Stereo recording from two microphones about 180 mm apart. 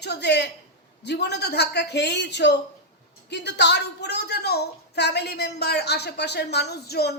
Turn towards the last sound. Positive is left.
turn(degrees=65)  # may be behind; listen again after turning